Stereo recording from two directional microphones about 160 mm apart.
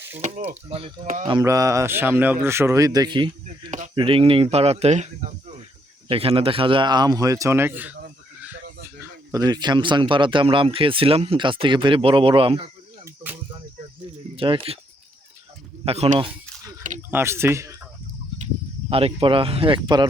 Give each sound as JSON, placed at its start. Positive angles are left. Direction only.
{"t": 0.2, "sound": "speech", "side_deg": -45}
{"t": 1.0, "sound": "speech", "side_deg": -50}
{"t": 1.3, "sound": "speech", "side_deg": -20}
{"t": 9.0, "sound": "speech", "side_deg": -25}
{"t": 14.3, "sound": "speech", "side_deg": -35}
{"t": 15.8, "sound": "a sound", "side_deg": -40}
{"t": 17.1, "sound": "speech", "side_deg": -15}
{"t": 18.9, "sound": "speech", "side_deg": -35}